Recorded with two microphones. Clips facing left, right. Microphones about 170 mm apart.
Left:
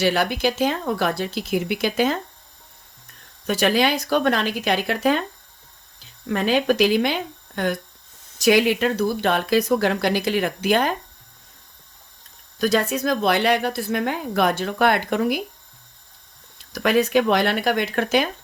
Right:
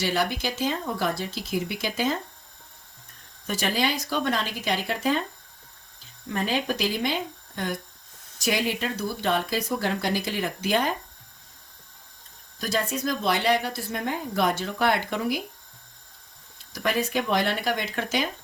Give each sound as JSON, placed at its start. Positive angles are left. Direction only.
{"t": 0.0, "sound": "speech", "side_deg": 65}
{"t": 3.4, "sound": "speech", "side_deg": 75}
{"t": 6.2, "sound": "speech", "side_deg": 75}
{"t": 12.5, "sound": "speech", "side_deg": 75}
{"t": 16.7, "sound": "speech", "side_deg": 75}